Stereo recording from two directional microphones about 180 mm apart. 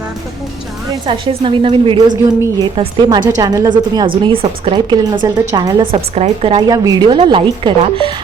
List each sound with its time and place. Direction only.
1.0 s a woman's voice: 30° right (ahead or behind)